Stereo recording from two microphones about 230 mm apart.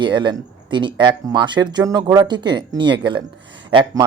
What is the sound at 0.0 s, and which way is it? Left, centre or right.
Speech, centre.